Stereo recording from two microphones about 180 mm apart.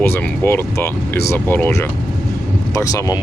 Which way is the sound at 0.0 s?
10° left (ahead or behind).